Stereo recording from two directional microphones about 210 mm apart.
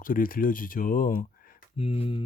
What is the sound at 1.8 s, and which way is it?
Speech, 25° left (ahead or behind).